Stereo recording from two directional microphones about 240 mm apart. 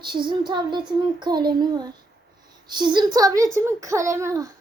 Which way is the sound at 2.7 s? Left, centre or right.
Centre.